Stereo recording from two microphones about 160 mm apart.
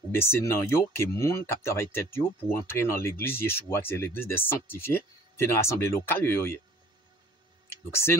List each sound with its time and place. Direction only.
0.1 s speech: 15° left (ahead or behind)